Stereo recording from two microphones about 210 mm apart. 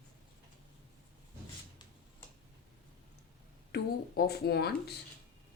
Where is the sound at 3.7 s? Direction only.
50° left (ahead or behind).